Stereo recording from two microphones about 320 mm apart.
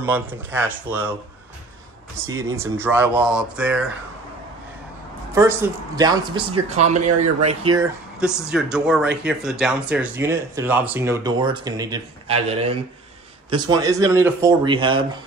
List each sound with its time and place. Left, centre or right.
0.0 s speech: centre
2.2 s speech: centre
5.3 s speech: centre
8.2 s speech: centre